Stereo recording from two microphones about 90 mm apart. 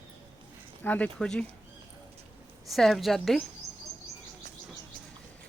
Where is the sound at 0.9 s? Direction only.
15° left (ahead or behind).